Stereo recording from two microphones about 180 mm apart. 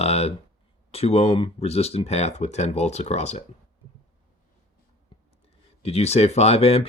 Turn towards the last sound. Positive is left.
turn(degrees=35)  # may be behind; listen again after turning